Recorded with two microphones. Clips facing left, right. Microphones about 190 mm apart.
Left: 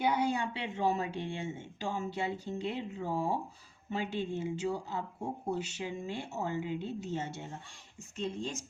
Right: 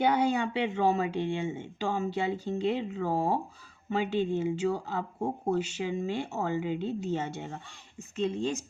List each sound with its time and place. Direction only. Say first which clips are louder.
0.0 s speech: right 5 dB; 70° right (ahead or behind)